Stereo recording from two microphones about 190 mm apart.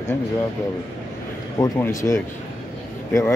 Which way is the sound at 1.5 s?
15° left (ahead or behind).